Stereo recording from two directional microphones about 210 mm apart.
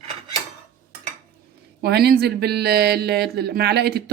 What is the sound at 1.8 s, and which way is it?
Speech, 50° right (ahead or behind).